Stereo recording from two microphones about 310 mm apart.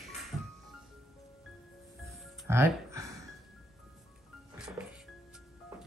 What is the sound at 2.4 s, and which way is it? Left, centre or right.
Music, centre.